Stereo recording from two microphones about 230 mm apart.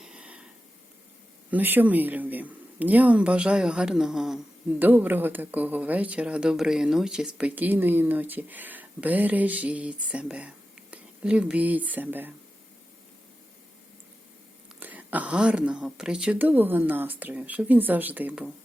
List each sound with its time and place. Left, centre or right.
0.0 s a sound: centre
1.5 s speech: centre
14.8 s speech: centre